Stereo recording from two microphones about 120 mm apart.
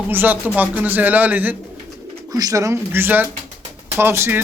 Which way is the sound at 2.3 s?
30° right (ahead or behind).